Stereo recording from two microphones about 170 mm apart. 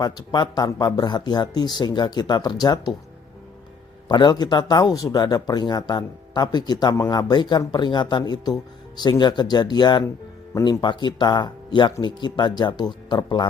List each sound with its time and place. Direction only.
0.0 s speech: 25° left (ahead or behind)
4.1 s speech: 25° left (ahead or behind)